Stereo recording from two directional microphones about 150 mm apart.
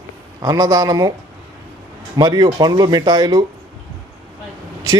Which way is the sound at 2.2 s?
30° right (ahead or behind).